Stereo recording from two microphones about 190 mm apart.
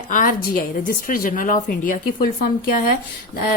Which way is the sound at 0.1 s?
45° left (ahead or behind).